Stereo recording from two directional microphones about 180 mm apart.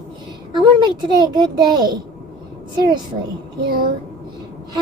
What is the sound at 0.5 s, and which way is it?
A child's voice, 25° right (ahead or behind).